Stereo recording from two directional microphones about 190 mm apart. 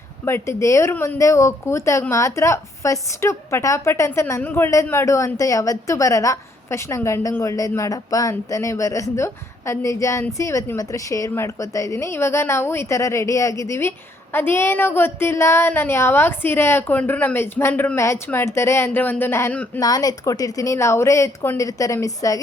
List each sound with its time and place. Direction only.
0.3 s speech: 15° left (ahead or behind)